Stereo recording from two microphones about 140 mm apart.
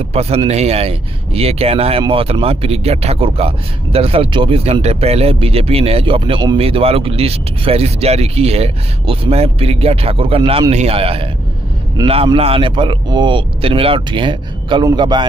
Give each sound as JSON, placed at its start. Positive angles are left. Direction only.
{"t": 0.1, "sound": "speech", "side_deg": -45}
{"t": 12.4, "sound": "speech", "side_deg": -45}